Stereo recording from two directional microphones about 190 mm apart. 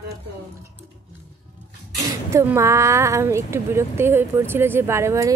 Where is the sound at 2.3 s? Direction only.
15° right (ahead or behind).